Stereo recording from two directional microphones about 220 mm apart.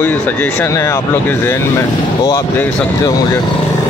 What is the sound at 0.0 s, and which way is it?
Speech, 10° left (ahead or behind).